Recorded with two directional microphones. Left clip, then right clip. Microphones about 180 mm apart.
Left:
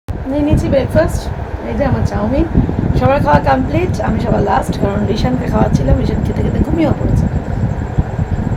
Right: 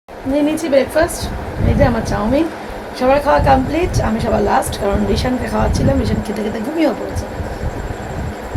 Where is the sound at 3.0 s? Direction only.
5° right (ahead or behind).